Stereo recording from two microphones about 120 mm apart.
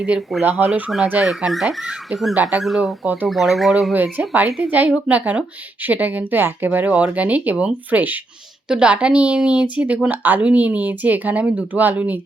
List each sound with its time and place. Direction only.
0.0 s speech: 5° right (ahead or behind)
0.4 s a woman's voice: 15° right (ahead or behind)
0.7 s speech: 5° right (ahead or behind)
1.0 s a woman's voice: 15° right (ahead or behind)
1.3 s speech: 5° right (ahead or behind)
2.3 s a woman's voice: 15° right (ahead or behind)
2.6 s speech: centre (ahead or behind)
3.9 s a woman's voice: 15° right (ahead or behind)